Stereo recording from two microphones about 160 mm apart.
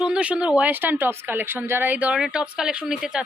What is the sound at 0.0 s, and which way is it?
Speech, 5° right (ahead or behind).